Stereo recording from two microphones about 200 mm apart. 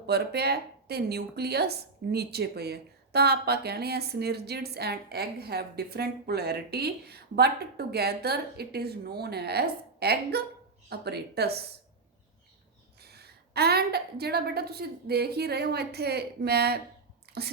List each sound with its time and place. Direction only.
0.0 s speech: 55° right (ahead or behind)
13.0 s speech: 55° right (ahead or behind)